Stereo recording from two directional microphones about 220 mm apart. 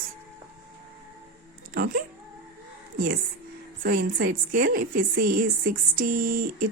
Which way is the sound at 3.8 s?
40° right (ahead or behind).